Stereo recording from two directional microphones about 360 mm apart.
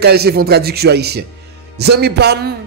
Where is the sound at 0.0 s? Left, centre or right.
Right.